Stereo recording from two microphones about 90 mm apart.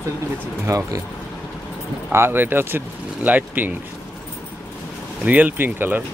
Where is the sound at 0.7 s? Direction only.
35° right (ahead or behind).